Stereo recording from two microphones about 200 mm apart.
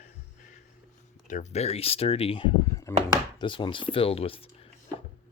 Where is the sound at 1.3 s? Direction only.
35° left (ahead or behind).